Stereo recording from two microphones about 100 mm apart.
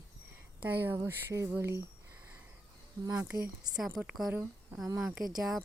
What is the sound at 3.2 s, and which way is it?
Speech, 15° right (ahead or behind).